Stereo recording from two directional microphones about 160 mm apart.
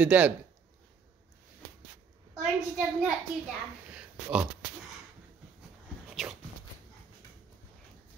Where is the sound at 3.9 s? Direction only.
5° right (ahead or behind).